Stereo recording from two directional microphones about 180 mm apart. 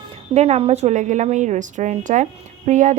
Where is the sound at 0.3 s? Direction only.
35° right (ahead or behind).